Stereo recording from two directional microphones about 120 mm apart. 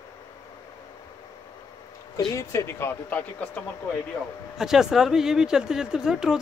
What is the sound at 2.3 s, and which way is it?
Speech, 25° left (ahead or behind).